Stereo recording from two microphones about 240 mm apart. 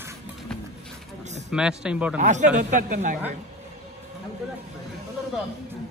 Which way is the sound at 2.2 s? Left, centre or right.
Right.